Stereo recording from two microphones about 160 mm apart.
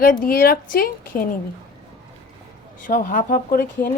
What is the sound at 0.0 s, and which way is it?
Speech, 65° left (ahead or behind).